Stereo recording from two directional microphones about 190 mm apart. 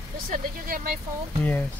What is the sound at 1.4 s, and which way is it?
Speech, 10° left (ahead or behind).